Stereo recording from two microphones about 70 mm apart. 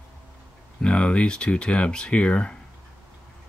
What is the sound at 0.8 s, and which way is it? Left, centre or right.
Speech, centre.